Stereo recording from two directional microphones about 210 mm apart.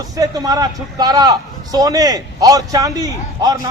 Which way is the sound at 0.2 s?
15° right (ahead or behind).